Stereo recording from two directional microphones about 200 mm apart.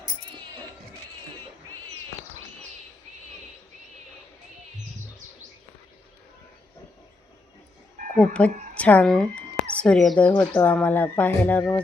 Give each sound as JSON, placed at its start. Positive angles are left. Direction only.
{"t": 8.1, "sound": "speech", "side_deg": 5}